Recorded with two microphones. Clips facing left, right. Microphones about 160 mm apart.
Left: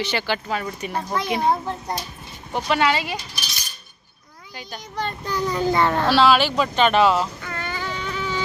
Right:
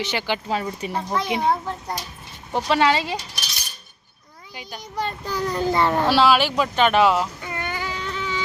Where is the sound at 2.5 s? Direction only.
30° right (ahead or behind).